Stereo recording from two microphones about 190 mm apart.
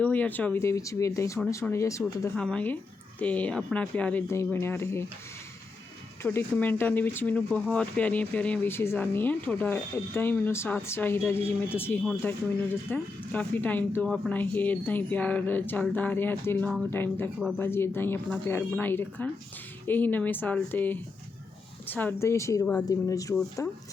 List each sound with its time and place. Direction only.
0.0 s speech: 10° left (ahead or behind)
2.3 s speech: 5° left (ahead or behind)
6.2 s speech: 10° left (ahead or behind)